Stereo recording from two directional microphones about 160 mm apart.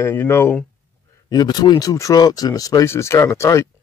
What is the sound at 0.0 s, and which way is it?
Speech, 15° left (ahead or behind).